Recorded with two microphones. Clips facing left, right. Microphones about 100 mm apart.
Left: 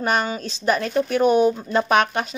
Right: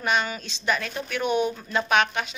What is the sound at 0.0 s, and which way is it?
A woman's voice, 40° left (ahead or behind).